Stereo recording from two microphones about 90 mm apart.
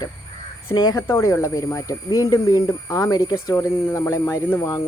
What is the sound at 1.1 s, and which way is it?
Speech, 30° left (ahead or behind).